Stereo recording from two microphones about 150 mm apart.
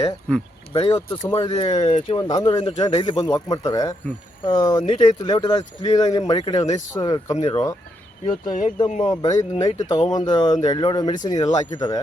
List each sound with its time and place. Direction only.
0.3 s speech: 10° left (ahead or behind)
0.7 s speech: 30° left (ahead or behind)
1.8 s speech: 45° left (ahead or behind)
2.0 s speech: 30° left (ahead or behind)
8.3 s speech: 60° left (ahead or behind)
9.0 s speech: 25° left (ahead or behind)